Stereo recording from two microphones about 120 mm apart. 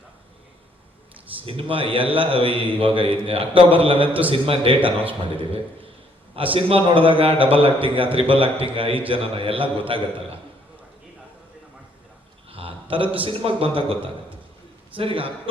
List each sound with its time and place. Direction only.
1.4 s a man's voice: 50° right (ahead or behind)
6.3 s a man's voice: 50° right (ahead or behind)
12.5 s a man's voice: 50° right (ahead or behind)